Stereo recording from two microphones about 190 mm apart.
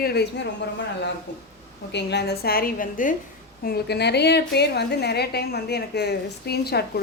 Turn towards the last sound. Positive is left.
turn(degrees=55)  # may be behind; listen again after turning